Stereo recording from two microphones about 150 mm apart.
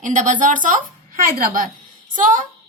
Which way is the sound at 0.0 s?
60° right (ahead or behind).